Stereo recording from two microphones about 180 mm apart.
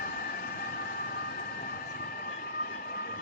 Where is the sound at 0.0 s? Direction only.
55° left (ahead or behind).